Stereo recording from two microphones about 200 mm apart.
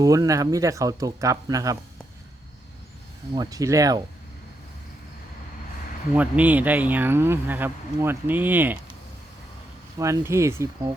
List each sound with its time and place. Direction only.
0.0 s speech: 15° right (ahead or behind)
3.3 s speech: 20° right (ahead or behind)
6.1 s speech: 5° right (ahead or behind)
10.0 s speech: 15° right (ahead or behind)